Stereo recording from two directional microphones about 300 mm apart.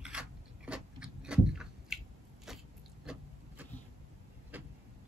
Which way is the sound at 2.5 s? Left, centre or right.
Centre.